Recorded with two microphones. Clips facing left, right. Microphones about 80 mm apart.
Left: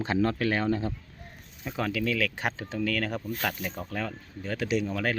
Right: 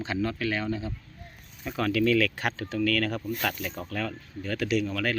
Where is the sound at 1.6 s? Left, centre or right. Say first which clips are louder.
Right 4 dB; centre.